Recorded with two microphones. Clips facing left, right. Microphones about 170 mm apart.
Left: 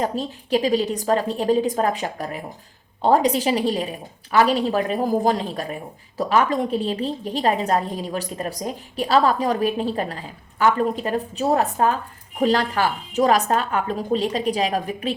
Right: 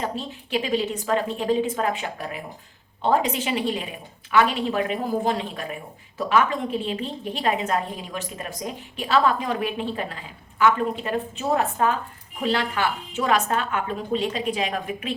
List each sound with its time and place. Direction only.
0.0 s a woman's voice: 40° left (ahead or behind)